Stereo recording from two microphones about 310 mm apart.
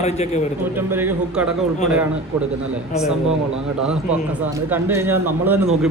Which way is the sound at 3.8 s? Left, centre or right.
Centre.